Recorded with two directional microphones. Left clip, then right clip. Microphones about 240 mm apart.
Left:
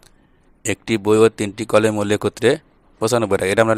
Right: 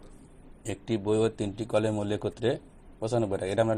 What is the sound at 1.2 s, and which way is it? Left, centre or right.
Speech, left.